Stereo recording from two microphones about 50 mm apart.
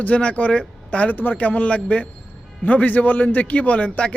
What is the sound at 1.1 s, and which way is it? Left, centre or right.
A man's voice, left.